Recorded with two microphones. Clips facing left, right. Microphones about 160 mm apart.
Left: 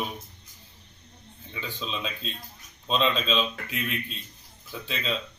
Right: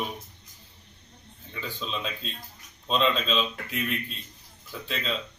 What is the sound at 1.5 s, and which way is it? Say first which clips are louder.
A man's voice: even; centre (ahead or behind).